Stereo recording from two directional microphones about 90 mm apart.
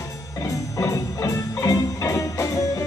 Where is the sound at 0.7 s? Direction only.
40° left (ahead or behind).